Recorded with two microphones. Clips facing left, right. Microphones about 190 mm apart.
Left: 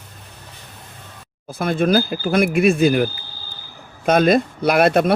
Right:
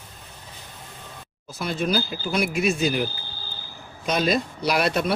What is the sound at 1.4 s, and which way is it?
Speech, 55° left (ahead or behind).